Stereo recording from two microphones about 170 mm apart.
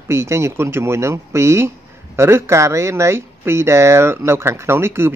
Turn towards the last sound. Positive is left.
turn(degrees=-15)  # may be behind; listen again after turning